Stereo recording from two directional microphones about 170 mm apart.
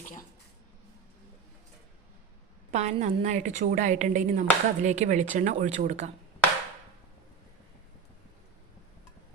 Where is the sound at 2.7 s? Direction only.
40° right (ahead or behind).